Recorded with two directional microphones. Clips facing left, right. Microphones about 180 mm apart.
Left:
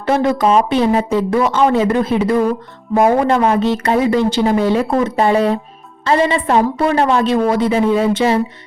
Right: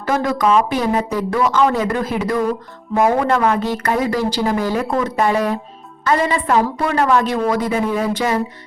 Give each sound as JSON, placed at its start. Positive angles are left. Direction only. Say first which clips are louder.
{"t": 0.0, "sound": "speech", "louder": "left 3 dB", "side_deg": 25}